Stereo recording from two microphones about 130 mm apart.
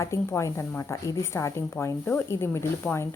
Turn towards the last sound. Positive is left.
turn(degrees=20)  # may be behind; listen again after turning